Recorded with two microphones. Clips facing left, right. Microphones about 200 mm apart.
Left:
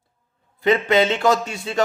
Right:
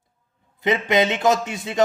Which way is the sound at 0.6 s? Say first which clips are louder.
Left 2 dB; 20° right (ahead or behind).